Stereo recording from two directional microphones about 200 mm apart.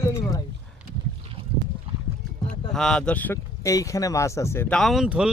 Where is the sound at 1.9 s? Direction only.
25° right (ahead or behind).